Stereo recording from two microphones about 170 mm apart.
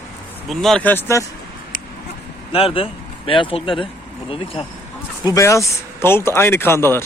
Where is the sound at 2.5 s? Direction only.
35° left (ahead or behind).